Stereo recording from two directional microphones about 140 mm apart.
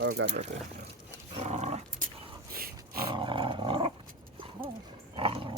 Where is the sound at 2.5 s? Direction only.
90° right.